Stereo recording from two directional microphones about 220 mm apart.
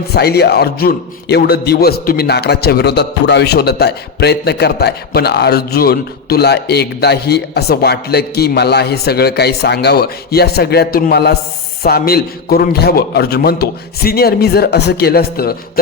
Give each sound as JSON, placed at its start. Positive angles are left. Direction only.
{"t": 0.1, "sound": "a man's voice", "side_deg": 45}